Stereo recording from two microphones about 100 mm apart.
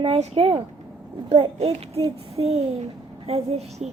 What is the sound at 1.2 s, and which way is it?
A child's voice, 85° right.